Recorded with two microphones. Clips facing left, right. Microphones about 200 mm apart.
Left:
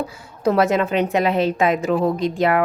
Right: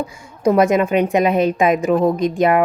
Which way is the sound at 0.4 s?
15° right (ahead or behind).